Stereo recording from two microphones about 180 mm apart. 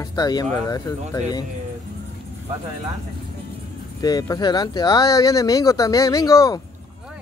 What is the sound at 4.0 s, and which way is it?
Speech, 20° left (ahead or behind).